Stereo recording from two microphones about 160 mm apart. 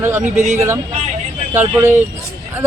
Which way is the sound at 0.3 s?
50° right (ahead or behind).